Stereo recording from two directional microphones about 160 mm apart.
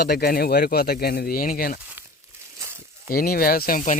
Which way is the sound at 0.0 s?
80° left.